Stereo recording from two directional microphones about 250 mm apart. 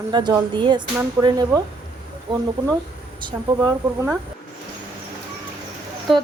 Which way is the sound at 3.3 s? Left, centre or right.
Centre.